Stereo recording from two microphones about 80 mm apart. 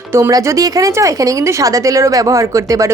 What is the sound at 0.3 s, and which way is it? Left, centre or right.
A woman's voice, right.